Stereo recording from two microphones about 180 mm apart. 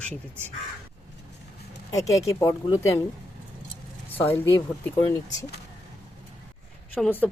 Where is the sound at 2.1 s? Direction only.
15° left (ahead or behind).